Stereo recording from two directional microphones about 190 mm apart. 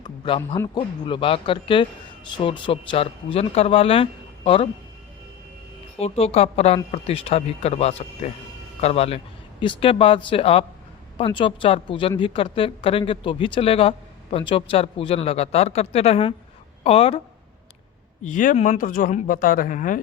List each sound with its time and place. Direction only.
0.3 s a woman's voice: 30° left (ahead or behind)
6.0 s a woman's voice: 30° left (ahead or behind)
18.2 s speech: 45° left (ahead or behind)